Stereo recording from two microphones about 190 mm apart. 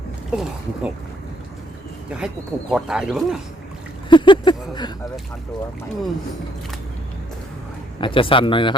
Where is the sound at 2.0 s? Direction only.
5° right (ahead or behind).